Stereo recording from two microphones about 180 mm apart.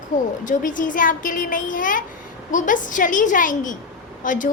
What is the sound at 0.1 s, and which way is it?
A woman's voice, 45° left (ahead or behind).